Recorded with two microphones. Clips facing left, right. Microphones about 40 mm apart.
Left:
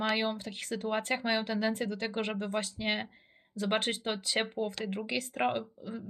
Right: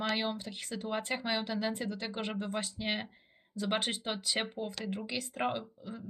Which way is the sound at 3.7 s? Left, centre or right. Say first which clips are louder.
Left 3 dB; left.